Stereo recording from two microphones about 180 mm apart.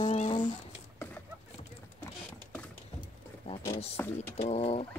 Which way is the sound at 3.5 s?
35° left (ahead or behind).